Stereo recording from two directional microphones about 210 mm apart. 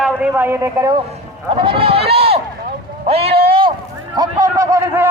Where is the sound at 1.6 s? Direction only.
25° right (ahead or behind).